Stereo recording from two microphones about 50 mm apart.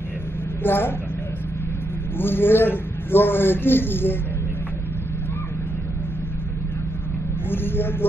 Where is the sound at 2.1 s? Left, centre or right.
Left.